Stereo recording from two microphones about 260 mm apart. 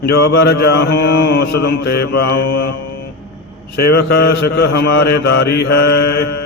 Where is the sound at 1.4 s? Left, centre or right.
Left.